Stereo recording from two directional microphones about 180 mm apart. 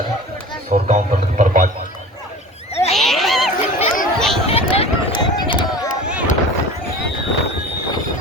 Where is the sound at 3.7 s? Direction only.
50° left (ahead or behind).